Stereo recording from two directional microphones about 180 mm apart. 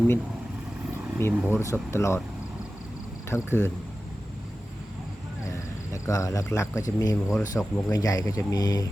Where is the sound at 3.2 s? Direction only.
15° left (ahead or behind).